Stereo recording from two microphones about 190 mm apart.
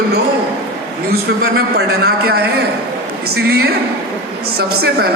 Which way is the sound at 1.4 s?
55° right (ahead or behind).